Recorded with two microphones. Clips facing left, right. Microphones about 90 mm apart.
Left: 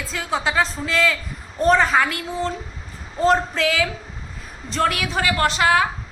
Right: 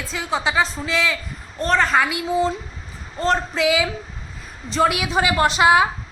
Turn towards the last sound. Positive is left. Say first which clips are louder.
# right 3 dB
turn(degrees=-15)  # may be behind; listen again after turning